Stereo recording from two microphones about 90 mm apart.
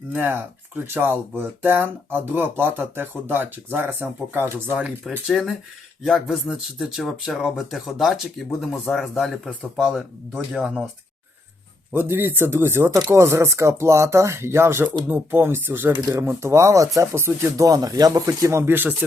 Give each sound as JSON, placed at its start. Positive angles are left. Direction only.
{"t": 0.1, "sound": "speech", "side_deg": -25}
{"t": 5.3, "sound": "speech", "side_deg": 5}
{"t": 11.9, "sound": "speech", "side_deg": -25}
{"t": 16.0, "sound": "speech", "side_deg": -40}
{"t": 16.2, "sound": "speech", "side_deg": -30}